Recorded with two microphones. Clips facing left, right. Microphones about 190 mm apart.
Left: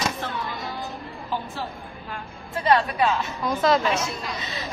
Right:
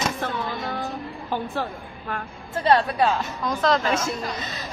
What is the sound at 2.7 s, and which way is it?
Speech, 35° right (ahead or behind).